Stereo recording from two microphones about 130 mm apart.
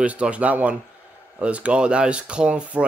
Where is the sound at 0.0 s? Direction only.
10° right (ahead or behind).